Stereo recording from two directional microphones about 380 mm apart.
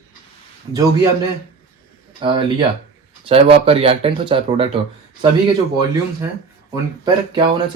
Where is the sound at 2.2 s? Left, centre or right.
Centre.